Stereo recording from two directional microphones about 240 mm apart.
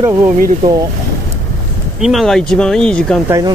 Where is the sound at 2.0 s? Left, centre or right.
Centre.